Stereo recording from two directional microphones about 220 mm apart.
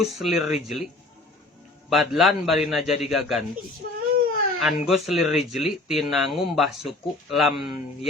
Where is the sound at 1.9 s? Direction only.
Centre (ahead or behind).